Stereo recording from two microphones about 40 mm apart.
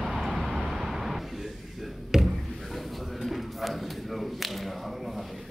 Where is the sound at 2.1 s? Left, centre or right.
Centre.